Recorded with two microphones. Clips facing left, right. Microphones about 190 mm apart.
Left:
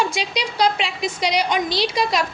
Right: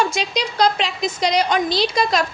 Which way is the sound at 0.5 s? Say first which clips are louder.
Right 1 dB; 40° right (ahead or behind).